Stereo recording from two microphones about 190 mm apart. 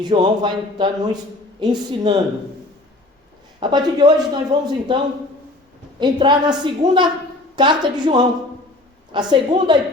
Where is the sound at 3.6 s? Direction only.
20° right (ahead or behind).